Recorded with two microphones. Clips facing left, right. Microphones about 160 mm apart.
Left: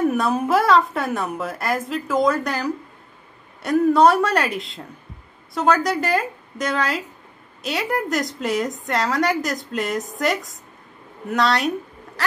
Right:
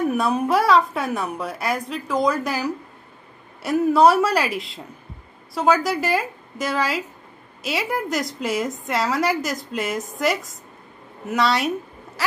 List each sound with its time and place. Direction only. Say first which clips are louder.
0.0 s a woman's voice: left 1 dB; centre (ahead or behind)